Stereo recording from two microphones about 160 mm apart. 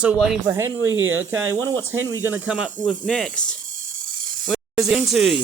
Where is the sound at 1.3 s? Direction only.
15° right (ahead or behind).